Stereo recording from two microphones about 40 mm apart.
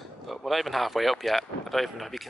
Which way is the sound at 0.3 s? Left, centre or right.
Centre.